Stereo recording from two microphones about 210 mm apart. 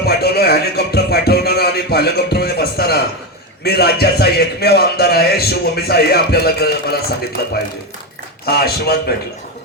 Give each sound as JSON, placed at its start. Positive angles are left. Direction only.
{"t": 0.0, "sound": "music", "side_deg": 50}
{"t": 3.6, "sound": "speech", "side_deg": 50}
{"t": 8.4, "sound": "speech", "side_deg": 50}